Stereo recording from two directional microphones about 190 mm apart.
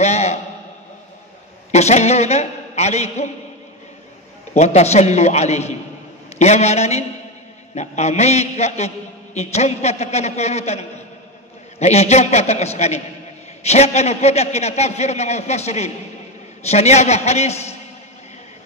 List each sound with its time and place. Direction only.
0.0 s a sound: 35° left (ahead or behind)
1.7 s a man's voice: 35° left (ahead or behind)
4.6 s a man's voice: 35° left (ahead or behind)